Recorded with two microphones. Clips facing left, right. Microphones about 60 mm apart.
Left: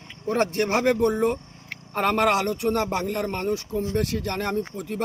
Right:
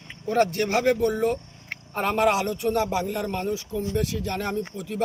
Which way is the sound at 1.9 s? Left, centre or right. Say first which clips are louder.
Left 1 dB; left.